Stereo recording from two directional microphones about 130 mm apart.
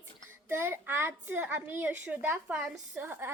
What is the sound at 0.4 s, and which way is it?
A woman's voice, 20° right (ahead or behind).